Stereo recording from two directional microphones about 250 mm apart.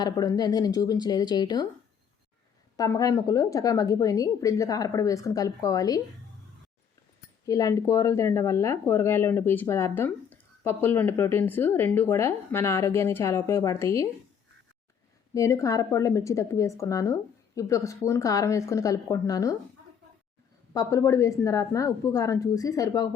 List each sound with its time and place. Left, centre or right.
0.0 s speech: centre
2.7 s speech: centre
7.4 s speech: centre
15.4 s speech: centre
20.7 s speech: centre